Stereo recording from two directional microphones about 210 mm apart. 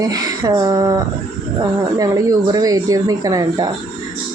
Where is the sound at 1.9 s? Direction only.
15° right (ahead or behind).